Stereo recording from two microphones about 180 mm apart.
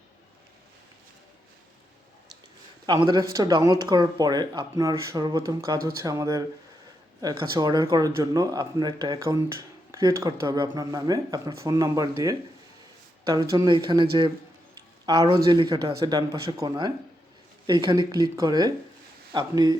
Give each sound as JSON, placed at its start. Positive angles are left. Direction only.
{"t": 2.8, "sound": "speech", "side_deg": -25}